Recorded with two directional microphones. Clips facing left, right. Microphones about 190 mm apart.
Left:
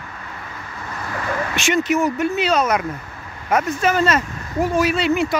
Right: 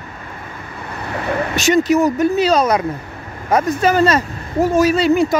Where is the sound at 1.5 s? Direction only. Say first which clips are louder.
Right 5 dB; 40° right (ahead or behind).